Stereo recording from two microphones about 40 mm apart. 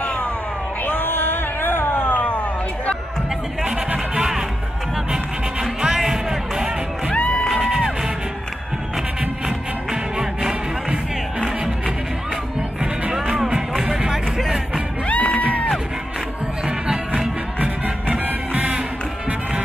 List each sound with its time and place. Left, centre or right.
0.8 s a sound: left
2.1 s music: left
3.6 s music: right
7.2 s music: left
7.5 s music: centre
9.8 s music: centre
13.5 s music: centre
15.0 s music: left
16.6 s music: right
18.2 s music: right